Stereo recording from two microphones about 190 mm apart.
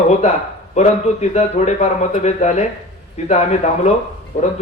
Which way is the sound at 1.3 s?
35° left (ahead or behind).